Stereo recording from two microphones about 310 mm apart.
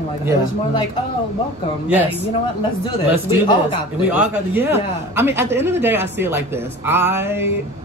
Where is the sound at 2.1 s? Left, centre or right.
Centre.